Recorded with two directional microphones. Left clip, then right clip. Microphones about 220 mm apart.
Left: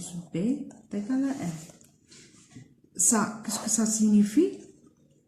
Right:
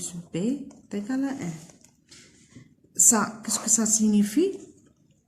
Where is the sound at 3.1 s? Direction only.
40° right (ahead or behind).